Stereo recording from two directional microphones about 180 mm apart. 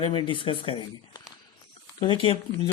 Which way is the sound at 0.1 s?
30° left (ahead or behind).